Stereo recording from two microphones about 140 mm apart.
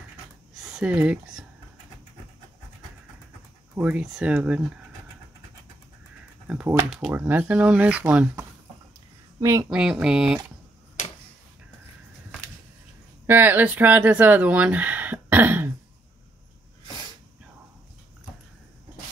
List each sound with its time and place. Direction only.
0.7 s speech: 5° right (ahead or behind)
3.7 s speech: 10° right (ahead or behind)
6.4 s speech: 10° right (ahead or behind)
9.4 s speech: 20° right (ahead or behind)
9.7 s speech: 5° right (ahead or behind)
11.0 s tick-tock: 60° left (ahead or behind)
13.3 s speech: 15° right (ahead or behind)